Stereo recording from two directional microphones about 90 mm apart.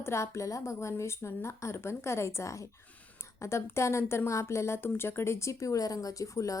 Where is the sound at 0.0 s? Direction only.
30° left (ahead or behind).